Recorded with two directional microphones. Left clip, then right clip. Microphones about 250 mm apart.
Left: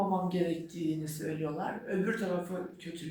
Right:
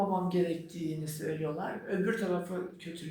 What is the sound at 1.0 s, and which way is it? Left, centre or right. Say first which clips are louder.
Speech: right 1 dB; centre.